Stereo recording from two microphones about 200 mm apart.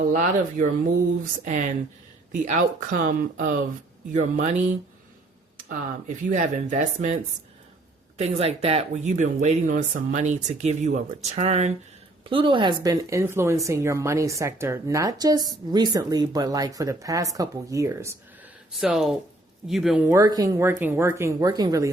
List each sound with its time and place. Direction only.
0.1 s speech: 40° right (ahead or behind)
5.5 s a sound: 45° right (ahead or behind)
6.3 s speech: 40° right (ahead or behind)
8.2 s speech: 30° right (ahead or behind); by 18.1 s 15° right (ahead or behind)
18.8 s speech: centre (ahead or behind); by 21.8 s 20° right (ahead or behind)